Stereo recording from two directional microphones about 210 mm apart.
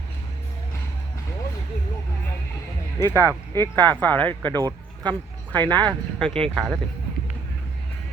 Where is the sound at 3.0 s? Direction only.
15° right (ahead or behind).